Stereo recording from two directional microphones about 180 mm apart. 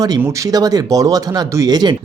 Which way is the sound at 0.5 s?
20° right (ahead or behind).